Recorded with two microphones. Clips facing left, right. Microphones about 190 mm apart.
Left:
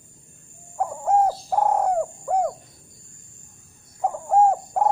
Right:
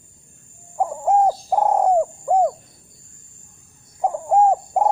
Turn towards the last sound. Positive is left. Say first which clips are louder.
# right 2 dB
turn(degrees=-15)  # may be behind; listen again after turning